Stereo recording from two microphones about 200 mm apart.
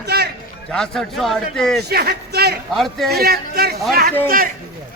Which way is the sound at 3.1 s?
50° right (ahead or behind).